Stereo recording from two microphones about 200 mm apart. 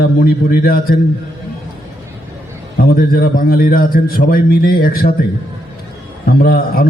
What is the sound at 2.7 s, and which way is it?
A man's voice, 45° left (ahead or behind).